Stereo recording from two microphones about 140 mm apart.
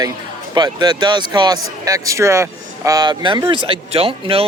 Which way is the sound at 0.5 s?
30° right (ahead or behind).